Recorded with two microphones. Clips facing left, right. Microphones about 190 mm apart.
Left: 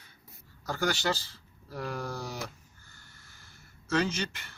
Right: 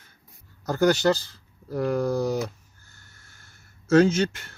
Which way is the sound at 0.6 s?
40° right (ahead or behind).